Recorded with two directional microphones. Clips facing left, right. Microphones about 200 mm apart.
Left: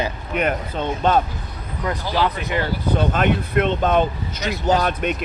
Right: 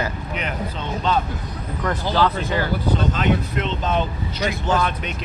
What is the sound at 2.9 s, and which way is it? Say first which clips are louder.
Speech: left 3 dB; 55° left (ahead or behind).